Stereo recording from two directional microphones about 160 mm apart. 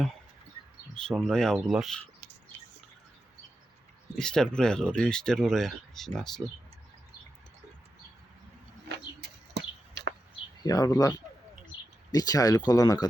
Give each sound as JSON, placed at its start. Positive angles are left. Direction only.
{"t": 0.9, "sound": "speech", "side_deg": 5}
{"t": 4.2, "sound": "speech", "side_deg": 5}
{"t": 9.9, "sound": "a sound", "side_deg": -90}
{"t": 10.6, "sound": "speech", "side_deg": 20}